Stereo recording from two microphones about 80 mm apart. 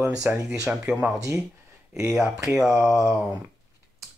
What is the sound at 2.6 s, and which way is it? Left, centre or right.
Speech, centre.